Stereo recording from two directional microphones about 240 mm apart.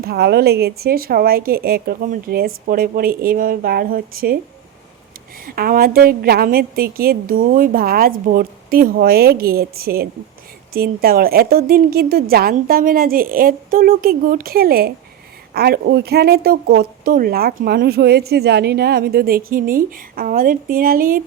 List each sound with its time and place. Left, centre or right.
0.0 s speech: right
5.5 s speech: right